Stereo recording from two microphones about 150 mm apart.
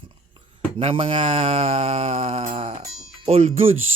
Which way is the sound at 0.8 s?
35° right (ahead or behind).